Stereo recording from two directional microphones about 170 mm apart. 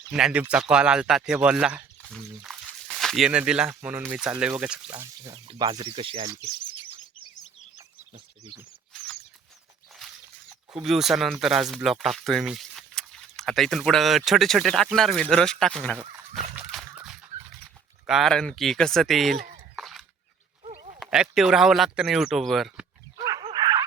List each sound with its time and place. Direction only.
0.1 s speech: 5° right (ahead or behind)
5.3 s speech: 30° right (ahead or behind)
10.8 s speech: centre (ahead or behind)
16.0 s dog: 5° right (ahead or behind)
18.0 s speech: centre (ahead or behind)
23.4 s dog: 25° right (ahead or behind)